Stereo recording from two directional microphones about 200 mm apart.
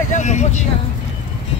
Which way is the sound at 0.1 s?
35° left (ahead or behind).